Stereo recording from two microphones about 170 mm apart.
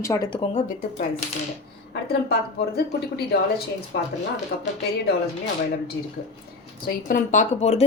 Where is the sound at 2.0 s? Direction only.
65° left (ahead or behind).